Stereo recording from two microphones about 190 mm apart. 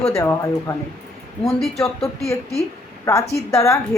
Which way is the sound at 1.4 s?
Centre (ahead or behind).